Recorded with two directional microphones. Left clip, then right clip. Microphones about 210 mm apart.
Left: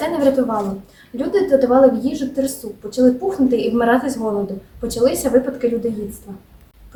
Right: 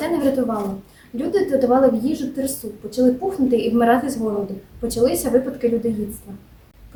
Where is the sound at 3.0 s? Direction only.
5° right (ahead or behind).